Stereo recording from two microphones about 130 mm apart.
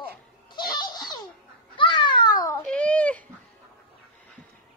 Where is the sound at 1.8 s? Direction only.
40° left (ahead or behind).